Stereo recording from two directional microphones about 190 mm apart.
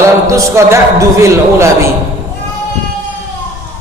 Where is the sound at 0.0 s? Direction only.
15° right (ahead or behind).